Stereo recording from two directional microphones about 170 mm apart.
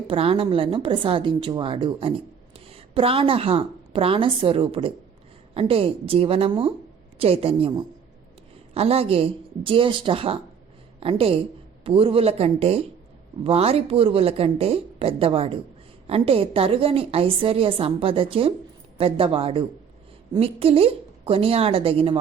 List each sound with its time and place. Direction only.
0.1 s a woman's voice: 35° right (ahead or behind)